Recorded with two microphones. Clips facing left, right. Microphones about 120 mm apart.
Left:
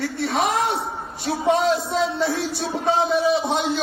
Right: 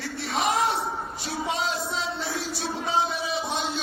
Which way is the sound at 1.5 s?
60° left (ahead or behind).